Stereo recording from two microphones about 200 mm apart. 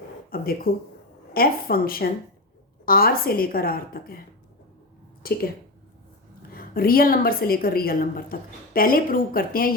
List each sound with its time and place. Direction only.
0.3 s a sound: 45° left (ahead or behind)
1.3 s a woman's voice: 50° left (ahead or behind)
5.2 s a woman's voice: 50° left (ahead or behind)
6.5 s a woman's voice: 45° left (ahead or behind)